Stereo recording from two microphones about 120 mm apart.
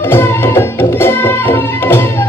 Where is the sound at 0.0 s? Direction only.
20° left (ahead or behind).